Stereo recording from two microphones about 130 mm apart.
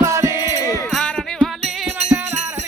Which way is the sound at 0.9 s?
Centre (ahead or behind).